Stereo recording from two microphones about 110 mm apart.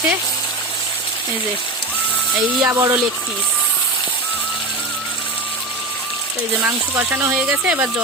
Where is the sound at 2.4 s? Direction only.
20° right (ahead or behind).